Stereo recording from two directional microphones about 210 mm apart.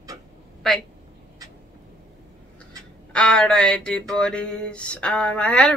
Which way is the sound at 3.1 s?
5° left (ahead or behind).